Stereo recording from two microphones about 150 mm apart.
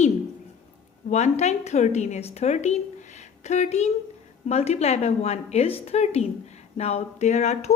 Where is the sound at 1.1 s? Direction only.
50° left (ahead or behind).